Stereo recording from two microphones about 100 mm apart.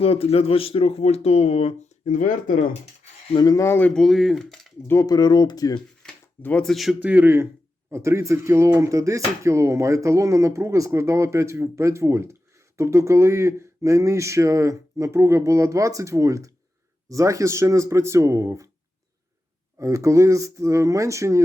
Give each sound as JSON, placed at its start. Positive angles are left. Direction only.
{"t": 0.0, "sound": "speech", "side_deg": 75}
{"t": 3.3, "sound": "speech", "side_deg": 40}
{"t": 3.9, "sound": "speech", "side_deg": 0}
{"t": 5.0, "sound": "speech", "side_deg": 45}
{"t": 6.0, "sound": "a sound", "side_deg": 5}
{"t": 6.6, "sound": "speech", "side_deg": 0}
{"t": 7.0, "sound": "speech", "side_deg": -20}
{"t": 19.8, "sound": "speech", "side_deg": -30}